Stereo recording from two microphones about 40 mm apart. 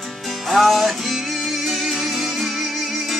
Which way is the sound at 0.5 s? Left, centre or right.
Centre.